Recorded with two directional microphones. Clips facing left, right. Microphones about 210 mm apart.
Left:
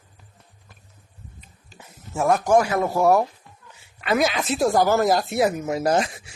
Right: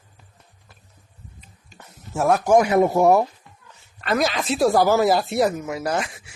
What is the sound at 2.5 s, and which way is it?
Speech, 20° right (ahead or behind).